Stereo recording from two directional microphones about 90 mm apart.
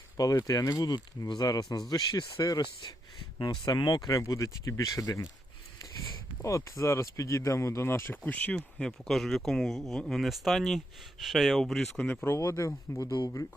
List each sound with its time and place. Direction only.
0.2 s speech: 40° left (ahead or behind)
3.3 s speech: 60° left (ahead or behind)
4.2 s speech: 35° left (ahead or behind); by 12.0 s 5° left (ahead or behind)
12.0 s speech: 20° left (ahead or behind)
12.4 s speech: 35° left (ahead or behind)